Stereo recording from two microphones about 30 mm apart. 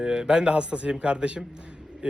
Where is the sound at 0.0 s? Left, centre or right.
Right.